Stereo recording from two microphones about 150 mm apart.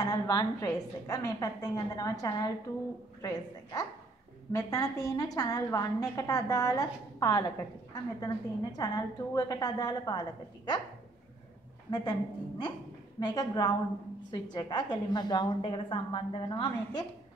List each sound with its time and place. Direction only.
0.0 s a woman's voice: 25° left (ahead or behind)
11.9 s a woman's voice: 30° left (ahead or behind)